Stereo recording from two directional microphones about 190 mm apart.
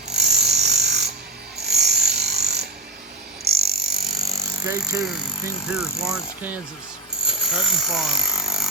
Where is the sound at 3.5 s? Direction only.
55° right (ahead or behind).